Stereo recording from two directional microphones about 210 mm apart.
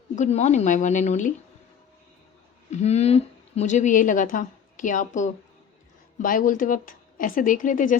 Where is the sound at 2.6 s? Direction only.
30° left (ahead or behind).